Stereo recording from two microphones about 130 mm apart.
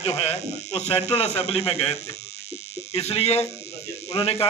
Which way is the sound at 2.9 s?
50° left (ahead or behind).